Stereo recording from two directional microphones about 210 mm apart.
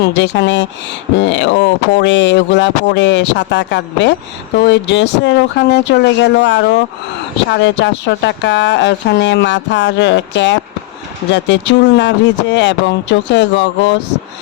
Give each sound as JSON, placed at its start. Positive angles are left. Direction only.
{"t": 0.0, "sound": "speech", "side_deg": 55}